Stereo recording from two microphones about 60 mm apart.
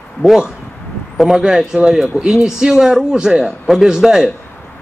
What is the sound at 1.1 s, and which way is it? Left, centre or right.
Speech, centre.